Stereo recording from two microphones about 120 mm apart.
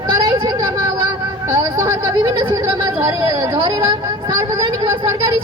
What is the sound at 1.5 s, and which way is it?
Speech, 20° right (ahead or behind).